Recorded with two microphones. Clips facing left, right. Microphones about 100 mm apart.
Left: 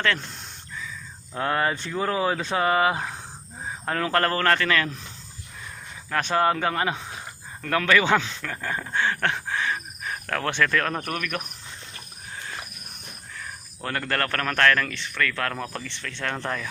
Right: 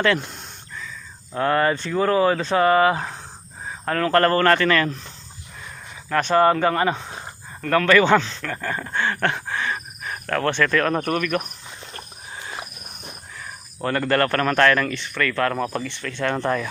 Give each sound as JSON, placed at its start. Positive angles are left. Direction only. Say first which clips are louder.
{"t": 0.0, "sound": "a sound", "louder": "right 5 dB", "side_deg": -5}
{"t": 1.4, "sound": "speech", "louder": "right 5 dB", "side_deg": 5}
{"t": 6.1, "sound": "speech", "louder": "right 5 dB", "side_deg": 0}
{"t": 12.4, "sound": "cricket", "louder": "right 3 dB", "side_deg": -20}
{"t": 13.4, "sound": "speech", "louder": "right 7 dB", "side_deg": -5}